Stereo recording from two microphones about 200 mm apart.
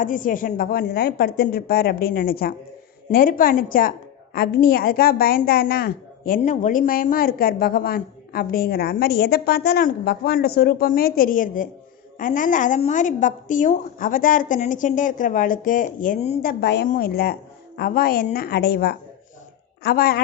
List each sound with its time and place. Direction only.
0.0 s a woman's voice: 40° left (ahead or behind)
16.4 s a woman's voice: 50° left (ahead or behind)